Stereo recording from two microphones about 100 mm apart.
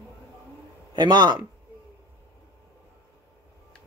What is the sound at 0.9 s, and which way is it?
Speech, 50° right (ahead or behind).